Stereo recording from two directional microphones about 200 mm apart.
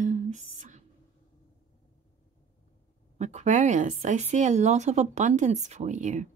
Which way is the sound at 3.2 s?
35° right (ahead or behind).